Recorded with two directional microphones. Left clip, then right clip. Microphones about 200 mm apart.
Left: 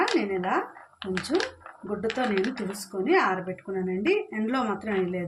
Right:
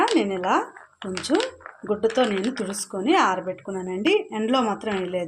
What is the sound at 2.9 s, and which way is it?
Speech, 40° right (ahead or behind).